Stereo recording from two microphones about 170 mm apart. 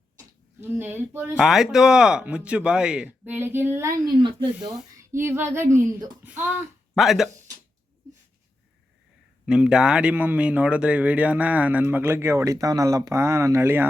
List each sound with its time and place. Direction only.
0.6 s speech: 10° right (ahead or behind)
1.5 s speech: centre (ahead or behind)
4.2 s speech: 30° right (ahead or behind)
4.9 s speech: 15° right (ahead or behind)
9.5 s speech: 5° right (ahead or behind)